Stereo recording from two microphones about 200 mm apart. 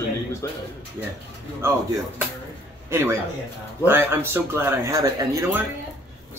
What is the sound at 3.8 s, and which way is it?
Speech, 10° right (ahead or behind).